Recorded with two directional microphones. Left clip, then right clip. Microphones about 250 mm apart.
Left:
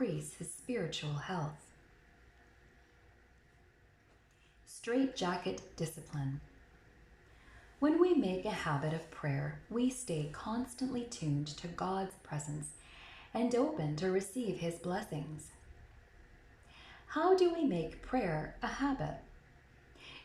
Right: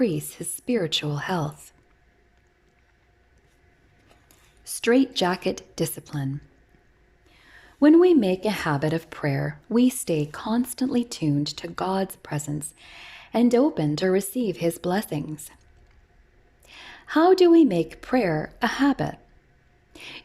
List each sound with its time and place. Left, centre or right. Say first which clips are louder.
0.0 s a woman's voice: right 13 dB; right
4.6 s a woman's voice: right 14 dB; right
7.8 s a woman's voice: right 13 dB; right
16.7 s a woman's voice: right 15 dB; right